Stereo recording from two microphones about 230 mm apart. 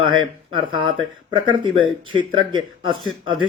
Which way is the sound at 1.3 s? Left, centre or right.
Right.